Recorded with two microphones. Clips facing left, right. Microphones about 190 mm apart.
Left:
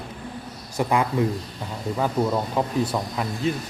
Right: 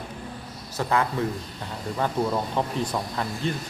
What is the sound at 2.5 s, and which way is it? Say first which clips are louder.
Speech: left 3 dB; 5° left (ahead or behind).